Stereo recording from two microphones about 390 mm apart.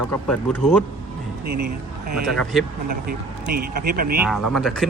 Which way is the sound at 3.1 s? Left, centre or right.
Right.